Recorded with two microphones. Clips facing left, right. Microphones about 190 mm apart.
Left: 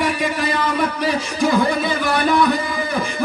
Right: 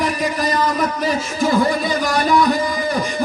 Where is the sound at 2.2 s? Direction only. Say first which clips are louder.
Even; 55° left (ahead or behind).